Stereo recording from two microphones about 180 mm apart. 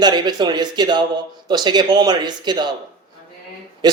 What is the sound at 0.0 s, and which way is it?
A man's voice, 25° right (ahead or behind).